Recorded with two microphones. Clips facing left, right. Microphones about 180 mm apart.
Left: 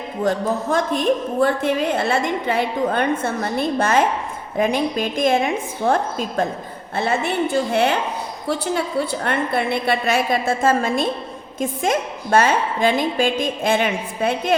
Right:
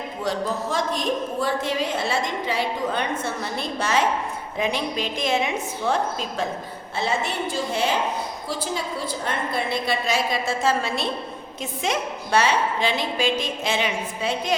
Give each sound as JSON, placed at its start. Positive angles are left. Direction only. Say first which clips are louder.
{"t": 0.2, "sound": "a woman's voice", "louder": "left 6 dB", "side_deg": 55}